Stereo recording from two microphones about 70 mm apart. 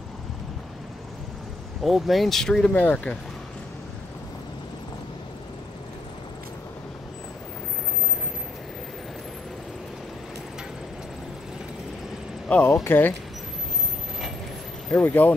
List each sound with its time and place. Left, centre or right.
1.8 s speech: centre
2.7 s speech: left
12.5 s speech: left
14.9 s speech: left